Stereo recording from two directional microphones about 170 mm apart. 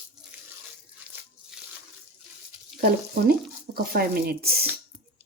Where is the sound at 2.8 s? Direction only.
65° right (ahead or behind).